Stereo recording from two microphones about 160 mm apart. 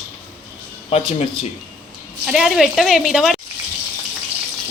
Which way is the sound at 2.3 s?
Centre (ahead or behind).